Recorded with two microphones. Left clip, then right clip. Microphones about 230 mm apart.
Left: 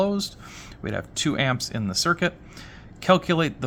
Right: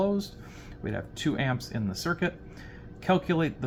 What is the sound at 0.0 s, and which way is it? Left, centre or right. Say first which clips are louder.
Speech: left 4 dB; left.